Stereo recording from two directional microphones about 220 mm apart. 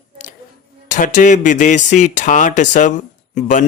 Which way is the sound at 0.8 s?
35° left (ahead or behind).